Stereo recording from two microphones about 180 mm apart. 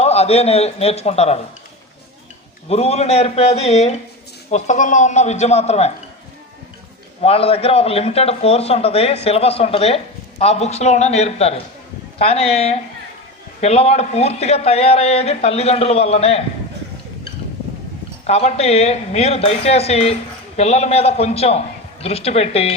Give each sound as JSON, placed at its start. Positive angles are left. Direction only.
{"t": 0.0, "sound": "a man's voice", "side_deg": 35}
{"t": 2.6, "sound": "a man's voice", "side_deg": 35}
{"t": 7.2, "sound": "a man's voice", "side_deg": 35}
{"t": 18.3, "sound": "a man's voice", "side_deg": 35}